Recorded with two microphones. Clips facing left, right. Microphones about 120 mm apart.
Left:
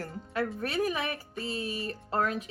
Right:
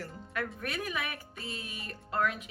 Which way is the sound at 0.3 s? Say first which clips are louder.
Left 6 dB; 30° left (ahead or behind).